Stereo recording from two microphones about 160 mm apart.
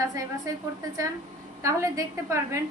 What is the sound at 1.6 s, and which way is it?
Speech, 20° right (ahead or behind).